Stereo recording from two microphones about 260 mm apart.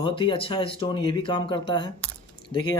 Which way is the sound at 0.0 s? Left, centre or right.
Centre.